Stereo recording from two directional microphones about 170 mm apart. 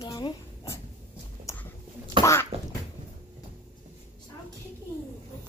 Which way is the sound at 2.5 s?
35° right (ahead or behind).